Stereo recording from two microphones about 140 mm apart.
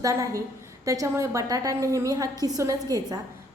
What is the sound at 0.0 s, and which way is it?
A woman's voice, 25° right (ahead or behind).